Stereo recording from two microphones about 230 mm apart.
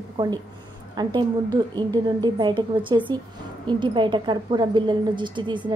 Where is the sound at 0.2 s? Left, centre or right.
Centre.